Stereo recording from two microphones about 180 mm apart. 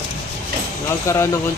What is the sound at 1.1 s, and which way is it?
Speech, 15° left (ahead or behind).